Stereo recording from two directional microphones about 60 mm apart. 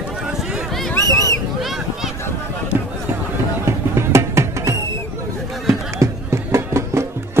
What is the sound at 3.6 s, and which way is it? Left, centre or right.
Music, right.